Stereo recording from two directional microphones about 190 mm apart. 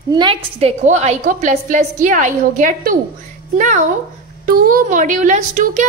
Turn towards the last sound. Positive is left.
turn(degrees=-40)  # may be behind; listen again after turning